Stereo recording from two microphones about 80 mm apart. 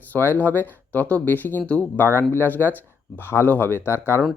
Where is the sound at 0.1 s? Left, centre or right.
Left.